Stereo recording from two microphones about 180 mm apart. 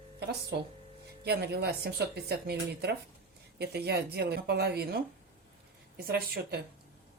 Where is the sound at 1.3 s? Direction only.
65° right (ahead or behind).